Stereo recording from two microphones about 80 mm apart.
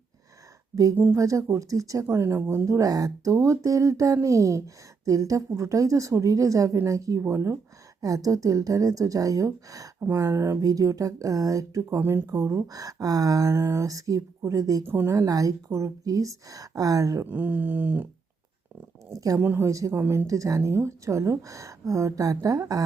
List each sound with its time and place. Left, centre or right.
1.1 s speech: right
2.6 s speech: right
8.0 s speech: right
10.0 s speech: right
11.9 s speech: right
12.3 s speech: right
14.8 s a sound: right
15.1 s speech: right
17.2 s a sound: right
19.4 s a sound: right
20.2 s speech: right